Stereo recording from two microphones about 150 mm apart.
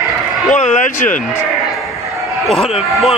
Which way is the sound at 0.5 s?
55° left (ahead or behind).